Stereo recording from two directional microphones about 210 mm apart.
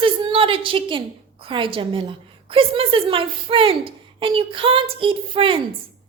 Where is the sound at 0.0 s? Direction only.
25° right (ahead or behind).